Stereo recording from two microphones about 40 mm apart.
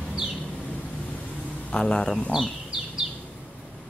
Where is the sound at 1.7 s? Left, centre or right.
Left.